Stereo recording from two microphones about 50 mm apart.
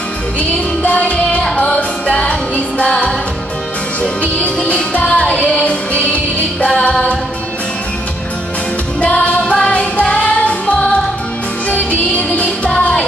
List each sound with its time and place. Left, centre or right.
0.4 s music: left
4.6 s music: left
6.7 s a capella: left
9.0 s music: left